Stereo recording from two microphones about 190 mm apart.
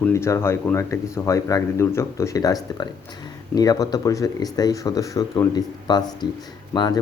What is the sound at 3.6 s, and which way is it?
Speech, 20° left (ahead or behind).